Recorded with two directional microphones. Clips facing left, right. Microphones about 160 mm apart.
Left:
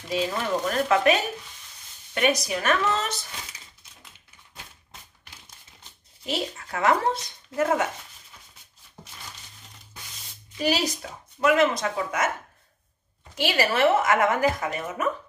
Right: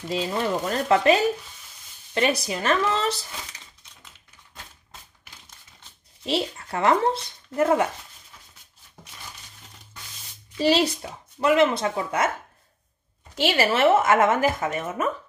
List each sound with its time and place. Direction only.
0.7 s a woman's voice: 30° right (ahead or behind)
6.2 s a woman's voice: 30° right (ahead or behind)
10.6 s a woman's voice: 30° right (ahead or behind)
13.4 s a woman's voice: 25° right (ahead or behind)